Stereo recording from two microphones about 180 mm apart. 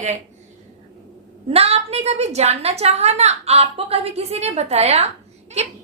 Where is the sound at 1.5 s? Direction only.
35° right (ahead or behind).